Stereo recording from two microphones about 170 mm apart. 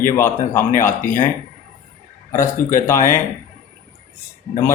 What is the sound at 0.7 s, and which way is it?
Speech, 50° left (ahead or behind).